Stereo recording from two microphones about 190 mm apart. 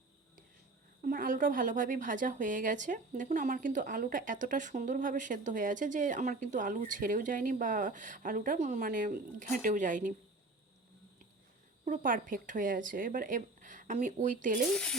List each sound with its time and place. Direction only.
1.0 s a woman's voice: 45° right (ahead or behind)
11.9 s a woman's voice: 45° right (ahead or behind)
14.7 s speech: 5° left (ahead or behind)